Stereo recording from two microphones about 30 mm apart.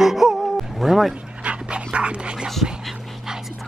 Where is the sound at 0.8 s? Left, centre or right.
Centre.